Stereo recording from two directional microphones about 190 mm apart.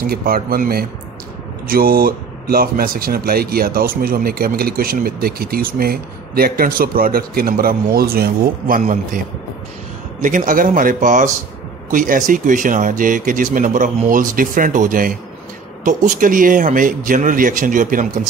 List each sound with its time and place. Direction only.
0.0 s speech: 50° right (ahead or behind)
10.2 s speech: 45° right (ahead or behind)